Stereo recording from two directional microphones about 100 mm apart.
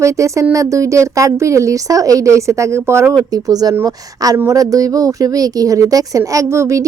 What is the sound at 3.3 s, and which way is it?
Speech, 40° right (ahead or behind).